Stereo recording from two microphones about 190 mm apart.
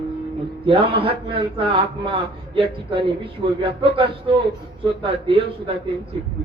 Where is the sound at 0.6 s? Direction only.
30° right (ahead or behind).